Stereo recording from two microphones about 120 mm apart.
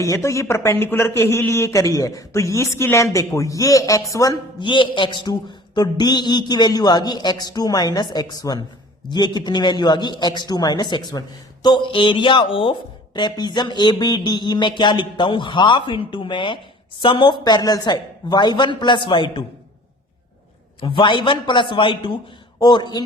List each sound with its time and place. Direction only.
0.0 s speech: 25° left (ahead or behind)
4.6 s a man's voice: 45° left (ahead or behind)
20.8 s a man's voice: 40° left (ahead or behind)